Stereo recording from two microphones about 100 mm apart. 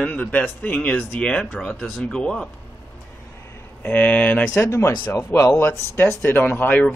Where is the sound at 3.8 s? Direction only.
15° left (ahead or behind).